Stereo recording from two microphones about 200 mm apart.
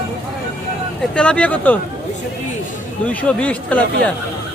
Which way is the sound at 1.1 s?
5° left (ahead or behind).